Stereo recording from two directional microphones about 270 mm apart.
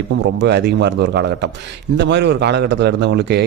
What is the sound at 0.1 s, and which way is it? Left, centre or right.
A man's voice, right.